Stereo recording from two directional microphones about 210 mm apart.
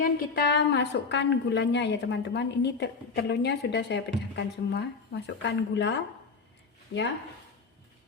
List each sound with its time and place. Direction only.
0.0 s a woman's voice: 50° left (ahead or behind)